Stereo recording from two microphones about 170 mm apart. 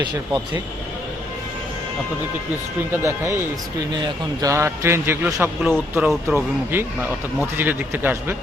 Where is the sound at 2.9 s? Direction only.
15° right (ahead or behind).